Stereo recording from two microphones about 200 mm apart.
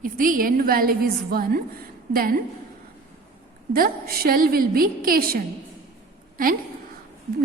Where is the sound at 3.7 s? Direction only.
45° right (ahead or behind).